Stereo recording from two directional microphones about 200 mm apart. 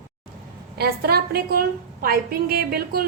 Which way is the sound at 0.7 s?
50° right (ahead or behind).